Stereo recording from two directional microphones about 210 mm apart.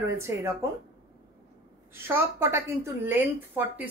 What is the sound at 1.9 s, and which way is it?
A woman's voice, 10° right (ahead or behind).